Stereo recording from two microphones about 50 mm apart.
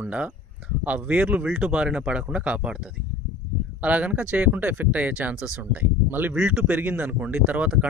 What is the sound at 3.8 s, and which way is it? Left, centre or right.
Speech, right.